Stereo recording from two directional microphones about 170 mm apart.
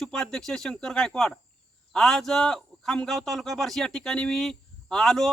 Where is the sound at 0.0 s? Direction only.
5° left (ahead or behind).